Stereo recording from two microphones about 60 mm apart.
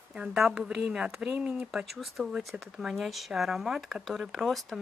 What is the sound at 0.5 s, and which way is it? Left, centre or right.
Speech, centre.